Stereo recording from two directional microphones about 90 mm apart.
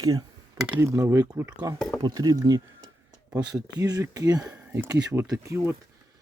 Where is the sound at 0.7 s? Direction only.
35° right (ahead or behind).